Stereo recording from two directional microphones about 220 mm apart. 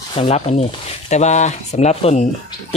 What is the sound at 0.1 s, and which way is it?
Speech, 25° left (ahead or behind).